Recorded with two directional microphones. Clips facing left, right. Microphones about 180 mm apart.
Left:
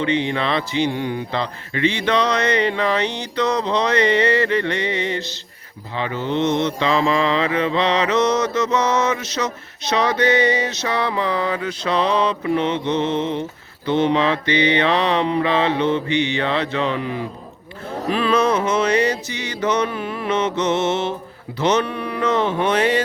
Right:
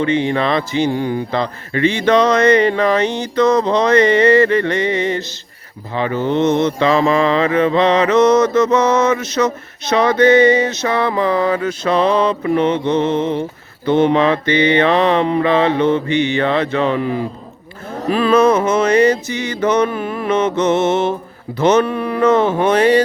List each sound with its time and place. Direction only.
0.0 s mantra: 45° right (ahead or behind)